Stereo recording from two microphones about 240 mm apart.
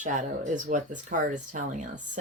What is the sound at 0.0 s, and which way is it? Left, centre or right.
Speech, right.